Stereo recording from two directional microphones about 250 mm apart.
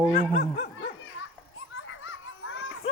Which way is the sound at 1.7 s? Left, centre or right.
Left.